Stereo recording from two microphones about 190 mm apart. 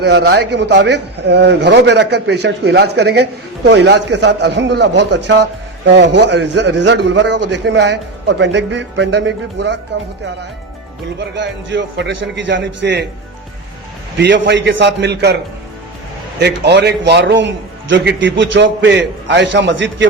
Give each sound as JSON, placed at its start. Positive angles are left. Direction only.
{"t": 0.0, "sound": "a man's voice", "side_deg": -60}
{"t": 11.3, "sound": "a man's voice", "side_deg": -70}
{"t": 14.2, "sound": "a man's voice", "side_deg": -70}
{"t": 16.4, "sound": "a man's voice", "side_deg": -65}